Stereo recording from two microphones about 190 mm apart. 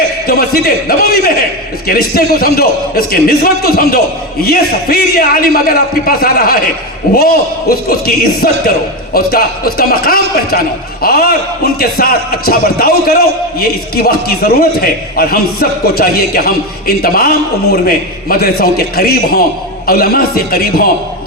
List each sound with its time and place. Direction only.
0.3 s a man's voice: 55° left (ahead or behind)